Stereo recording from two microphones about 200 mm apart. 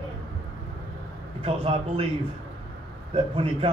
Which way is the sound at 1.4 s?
30° right (ahead or behind).